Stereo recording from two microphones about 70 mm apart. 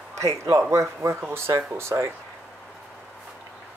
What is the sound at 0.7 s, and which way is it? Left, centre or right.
Speech, right.